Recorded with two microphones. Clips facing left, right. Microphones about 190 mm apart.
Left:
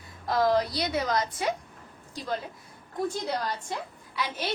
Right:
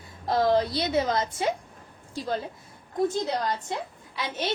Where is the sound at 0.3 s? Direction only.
30° right (ahead or behind).